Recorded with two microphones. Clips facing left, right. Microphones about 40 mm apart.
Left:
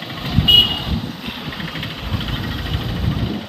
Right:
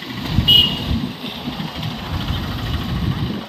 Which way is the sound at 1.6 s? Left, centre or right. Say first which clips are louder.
Even; left.